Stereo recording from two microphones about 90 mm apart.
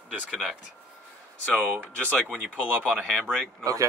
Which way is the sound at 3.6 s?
35° right (ahead or behind).